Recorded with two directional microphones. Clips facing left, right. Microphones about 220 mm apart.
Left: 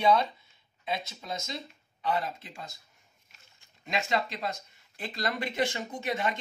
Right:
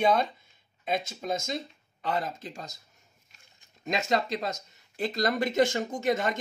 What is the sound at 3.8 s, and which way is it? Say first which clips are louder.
Speech: right 3 dB; 40° right (ahead or behind).